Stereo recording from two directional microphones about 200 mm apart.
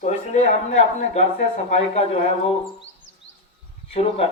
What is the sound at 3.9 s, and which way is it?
Speech, 30° left (ahead or behind).